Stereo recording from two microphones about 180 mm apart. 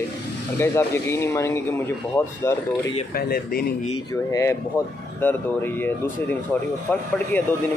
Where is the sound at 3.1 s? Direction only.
55° left (ahead or behind).